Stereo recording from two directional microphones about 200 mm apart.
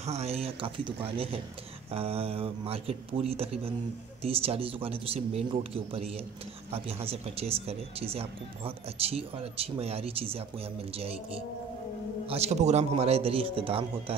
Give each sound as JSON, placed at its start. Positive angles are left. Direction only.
{"t": 0.0, "sound": "speech", "side_deg": -35}